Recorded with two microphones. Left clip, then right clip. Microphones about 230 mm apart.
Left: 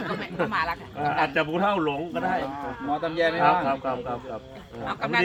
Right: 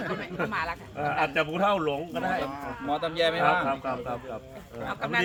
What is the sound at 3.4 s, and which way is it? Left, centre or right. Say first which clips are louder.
Speech: left 3 dB; centre.